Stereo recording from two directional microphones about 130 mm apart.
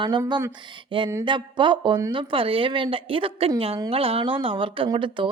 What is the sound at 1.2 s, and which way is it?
A woman's voice, 40° right (ahead or behind).